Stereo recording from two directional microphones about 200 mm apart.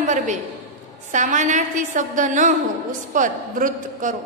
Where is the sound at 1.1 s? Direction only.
40° right (ahead or behind).